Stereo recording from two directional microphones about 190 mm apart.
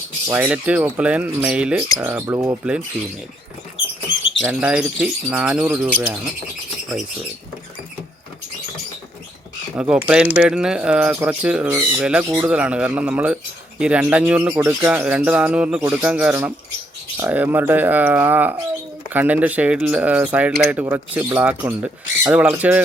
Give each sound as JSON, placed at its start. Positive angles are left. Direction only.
{"t": 0.3, "sound": "speech", "side_deg": -10}
{"t": 3.8, "sound": "rodents", "side_deg": 80}
{"t": 4.4, "sound": "speech", "side_deg": -5}
{"t": 9.9, "sound": "speech", "side_deg": -5}